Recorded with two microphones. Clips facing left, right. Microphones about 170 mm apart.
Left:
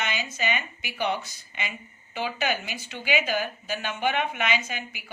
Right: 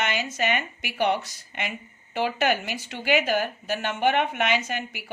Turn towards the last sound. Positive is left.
turn(degrees=-70)  # may be behind; listen again after turning